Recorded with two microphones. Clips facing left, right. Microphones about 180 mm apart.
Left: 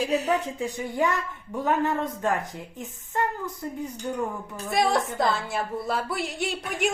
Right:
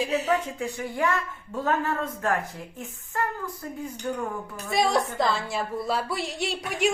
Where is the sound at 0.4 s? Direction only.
20° left (ahead or behind).